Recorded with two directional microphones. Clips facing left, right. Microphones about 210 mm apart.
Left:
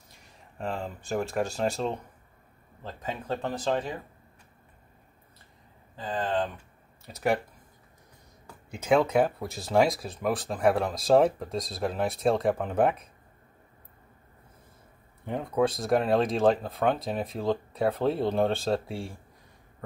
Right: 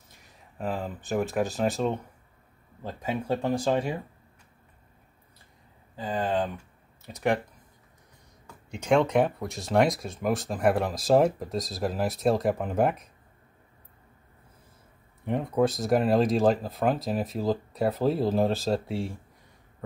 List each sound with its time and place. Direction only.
0.6 s speech: 5° right (ahead or behind)
5.9 s speech: 10° right (ahead or behind)
7.1 s speech: centre (ahead or behind)
8.6 s speech: 5° left (ahead or behind)
15.2 s speech: centre (ahead or behind)